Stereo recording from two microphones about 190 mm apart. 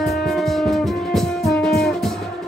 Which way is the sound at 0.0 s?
Centre (ahead or behind).